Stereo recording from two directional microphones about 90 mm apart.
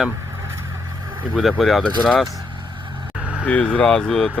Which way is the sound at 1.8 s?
15° left (ahead or behind).